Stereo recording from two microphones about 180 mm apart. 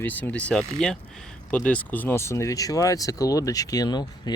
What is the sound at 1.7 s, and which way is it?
Speech, 10° left (ahead or behind).